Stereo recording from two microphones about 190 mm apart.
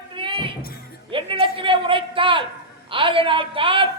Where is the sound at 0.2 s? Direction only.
25° right (ahead or behind).